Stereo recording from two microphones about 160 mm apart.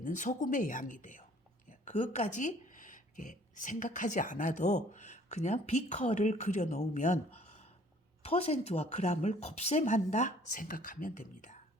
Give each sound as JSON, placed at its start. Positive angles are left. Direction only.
{"t": 0.0, "sound": "speech", "side_deg": 50}